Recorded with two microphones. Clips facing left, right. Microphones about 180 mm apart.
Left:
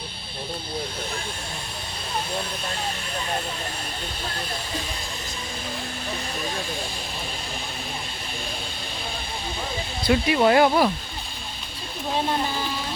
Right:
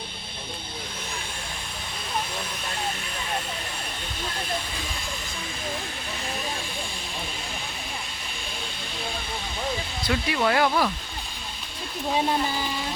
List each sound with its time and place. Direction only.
10.1 s speech: 25° left (ahead or behind)